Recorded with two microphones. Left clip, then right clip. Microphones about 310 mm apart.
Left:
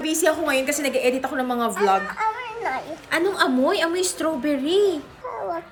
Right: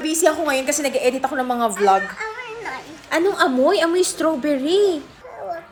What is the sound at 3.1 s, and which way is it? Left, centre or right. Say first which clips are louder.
A woman's voice: right 3 dB; centre.